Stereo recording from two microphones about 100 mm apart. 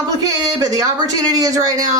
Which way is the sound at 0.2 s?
40° right (ahead or behind).